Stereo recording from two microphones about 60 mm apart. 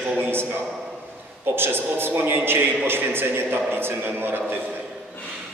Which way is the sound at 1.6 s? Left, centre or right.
Right.